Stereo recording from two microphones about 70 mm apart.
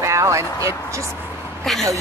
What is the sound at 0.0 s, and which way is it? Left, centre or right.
Speech, right.